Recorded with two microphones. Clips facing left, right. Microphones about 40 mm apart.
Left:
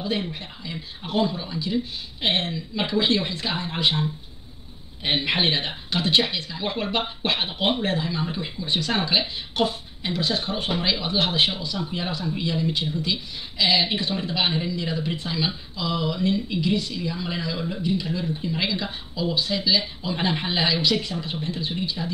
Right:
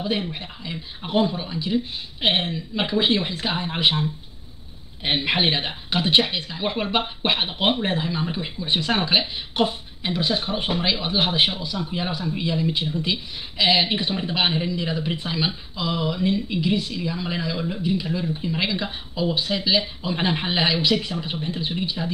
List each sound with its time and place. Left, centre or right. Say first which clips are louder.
0.0 s speech: right 2 dB; right
5.0 s speech: right 1 dB; centre
13.0 s speech: right 1 dB; right